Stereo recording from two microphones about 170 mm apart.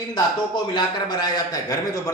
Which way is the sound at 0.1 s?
25° left (ahead or behind).